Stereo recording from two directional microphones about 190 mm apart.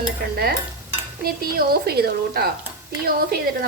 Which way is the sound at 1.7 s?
55° right (ahead or behind).